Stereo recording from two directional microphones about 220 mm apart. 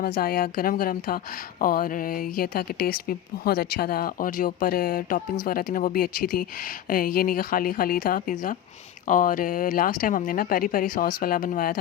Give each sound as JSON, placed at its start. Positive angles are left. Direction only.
{"t": 0.0, "sound": "speech", "side_deg": 40}